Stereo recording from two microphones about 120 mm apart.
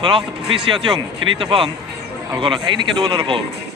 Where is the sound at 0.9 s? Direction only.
35° right (ahead or behind).